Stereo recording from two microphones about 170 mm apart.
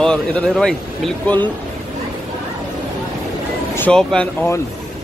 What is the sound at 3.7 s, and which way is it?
Speech, 5° left (ahead or behind).